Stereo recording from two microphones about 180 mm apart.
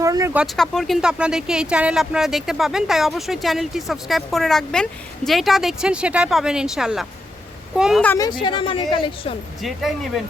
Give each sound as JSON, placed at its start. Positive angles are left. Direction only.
{"t": 0.0, "sound": "a sound", "side_deg": -20}
{"t": 0.3, "sound": "speech", "side_deg": 0}
{"t": 8.0, "sound": "speech", "side_deg": 15}
{"t": 8.3, "sound": "a woman's voice", "side_deg": 25}
{"t": 9.6, "sound": "speech", "side_deg": 0}